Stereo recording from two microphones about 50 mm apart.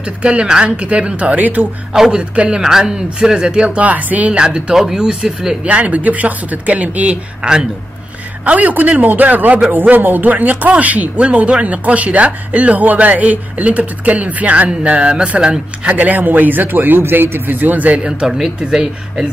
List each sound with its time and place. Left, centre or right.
0.0 s speech: right
2.0 s speech: centre
2.3 s speech: right
2.6 s speech: centre; by 4.3 s right
4.3 s speech: centre
5.7 s speech: right
7.4 s speech: centre
8.5 s speech: right
18.6 s speech: centre